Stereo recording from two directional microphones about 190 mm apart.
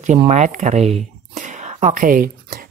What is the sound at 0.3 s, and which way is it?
Speech, 40° right (ahead or behind).